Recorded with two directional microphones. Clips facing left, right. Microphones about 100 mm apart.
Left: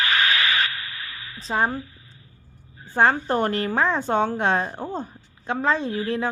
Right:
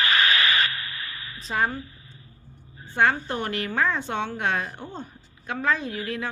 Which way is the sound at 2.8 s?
40° left (ahead or behind).